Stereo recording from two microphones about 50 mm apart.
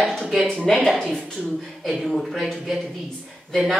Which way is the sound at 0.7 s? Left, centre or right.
Centre.